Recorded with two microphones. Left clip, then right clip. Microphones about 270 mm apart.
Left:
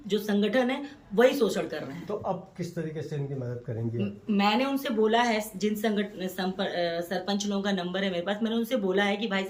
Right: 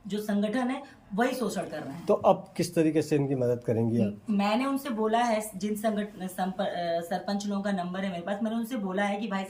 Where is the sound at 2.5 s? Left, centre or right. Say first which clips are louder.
Right 10 dB; right.